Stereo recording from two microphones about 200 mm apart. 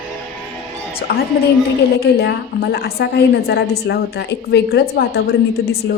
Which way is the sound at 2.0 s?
55° left (ahead or behind).